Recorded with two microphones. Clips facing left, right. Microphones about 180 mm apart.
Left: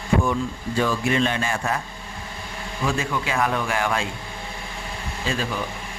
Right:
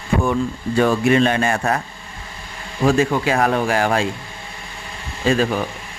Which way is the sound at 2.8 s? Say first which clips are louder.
Right 9 dB; 45° right (ahead or behind).